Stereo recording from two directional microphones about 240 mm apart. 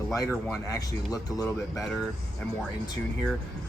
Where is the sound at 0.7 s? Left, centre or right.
Centre.